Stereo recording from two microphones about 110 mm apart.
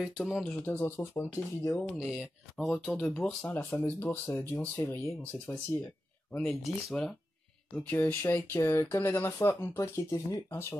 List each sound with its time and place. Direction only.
0.0 s speech: 5° right (ahead or behind)
0.7 s speech: 25° left (ahead or behind)
2.0 s speech: 5° right (ahead or behind); by 5.1 s 25° left (ahead or behind)
6.3 s speech: 5° left (ahead or behind)
7.7 s speech: 15° left (ahead or behind)